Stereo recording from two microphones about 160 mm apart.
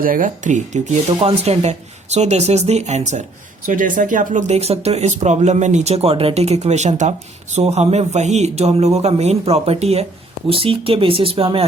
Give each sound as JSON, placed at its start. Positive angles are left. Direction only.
{"t": 0.0, "sound": "speech", "side_deg": -60}